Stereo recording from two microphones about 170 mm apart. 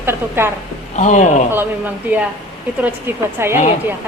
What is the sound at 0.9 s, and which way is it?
Speech, 45° left (ahead or behind).